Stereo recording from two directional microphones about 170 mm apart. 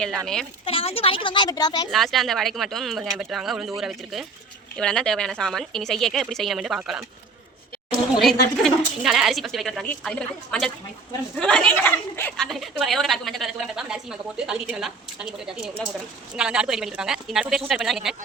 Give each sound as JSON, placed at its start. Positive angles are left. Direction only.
{"t": 0.6, "sound": "a woman's voice", "side_deg": 35}
{"t": 1.9, "sound": "a woman's voice", "side_deg": 0}
{"t": 8.2, "sound": "a woman's voice", "side_deg": 0}
{"t": 12.5, "sound": "a woman's voice", "side_deg": 0}